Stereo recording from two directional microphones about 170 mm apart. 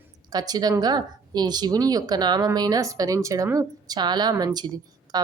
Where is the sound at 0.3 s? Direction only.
25° right (ahead or behind).